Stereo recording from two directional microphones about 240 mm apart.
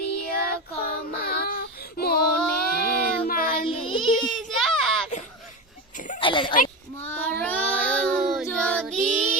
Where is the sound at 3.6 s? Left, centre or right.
Left.